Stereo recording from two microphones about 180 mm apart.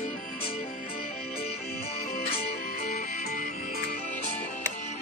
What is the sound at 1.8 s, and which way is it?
Music, 35° left (ahead or behind).